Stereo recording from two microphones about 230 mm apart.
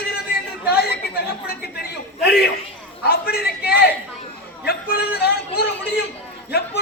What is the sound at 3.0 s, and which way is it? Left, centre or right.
A man's voice, left.